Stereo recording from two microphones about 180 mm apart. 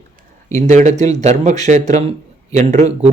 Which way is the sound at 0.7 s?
40° right (ahead or behind).